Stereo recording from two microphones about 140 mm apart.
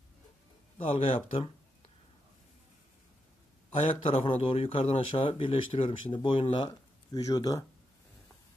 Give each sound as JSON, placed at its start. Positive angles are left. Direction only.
{"t": 0.7, "sound": "speech", "side_deg": 40}
{"t": 3.9, "sound": "speech", "side_deg": 40}